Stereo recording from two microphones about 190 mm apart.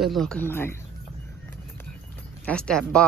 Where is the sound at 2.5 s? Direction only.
5° left (ahead or behind).